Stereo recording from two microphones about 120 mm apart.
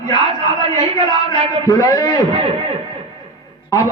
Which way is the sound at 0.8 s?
60° right (ahead or behind).